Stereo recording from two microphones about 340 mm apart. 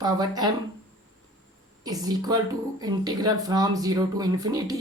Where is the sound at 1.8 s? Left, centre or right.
Centre.